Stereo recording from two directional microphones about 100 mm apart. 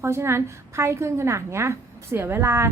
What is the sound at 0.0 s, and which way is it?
A woman's voice, 25° right (ahead or behind).